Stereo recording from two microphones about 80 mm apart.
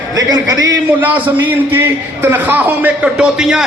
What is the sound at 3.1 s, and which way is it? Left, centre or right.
Speech, centre.